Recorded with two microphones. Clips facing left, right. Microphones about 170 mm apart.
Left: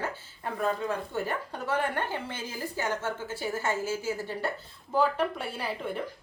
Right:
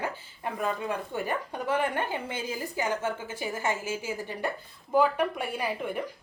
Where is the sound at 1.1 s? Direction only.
15° right (ahead or behind).